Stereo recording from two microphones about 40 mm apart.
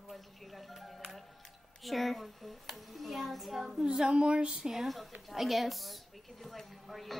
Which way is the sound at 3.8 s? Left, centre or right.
Centre.